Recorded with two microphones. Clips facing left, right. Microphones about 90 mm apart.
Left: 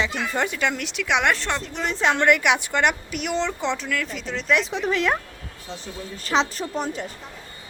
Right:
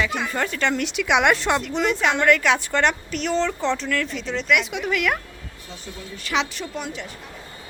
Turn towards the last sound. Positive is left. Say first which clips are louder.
# left 3 dB
turn(degrees=40)  # may be behind; listen again after turning